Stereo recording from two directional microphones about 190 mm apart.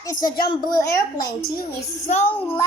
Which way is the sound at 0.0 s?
20° left (ahead or behind).